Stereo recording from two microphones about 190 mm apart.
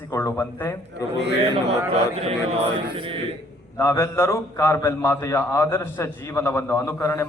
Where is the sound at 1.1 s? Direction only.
65° right (ahead or behind).